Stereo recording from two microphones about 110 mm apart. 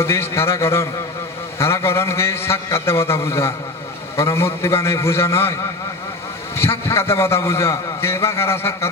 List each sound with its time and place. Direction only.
0.0 s a man's voice: 25° left (ahead or behind)
6.5 s a man's voice: 20° left (ahead or behind)